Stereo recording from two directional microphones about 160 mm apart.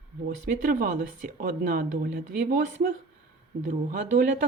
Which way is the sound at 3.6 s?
55° right (ahead or behind).